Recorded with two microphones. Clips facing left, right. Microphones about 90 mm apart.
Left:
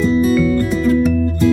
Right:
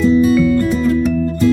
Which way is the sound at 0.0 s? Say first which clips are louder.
Right 2 dB; centre (ahead or behind).